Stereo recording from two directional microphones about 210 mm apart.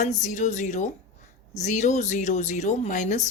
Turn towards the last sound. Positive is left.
turn(degrees=35)  # may be behind; listen again after turning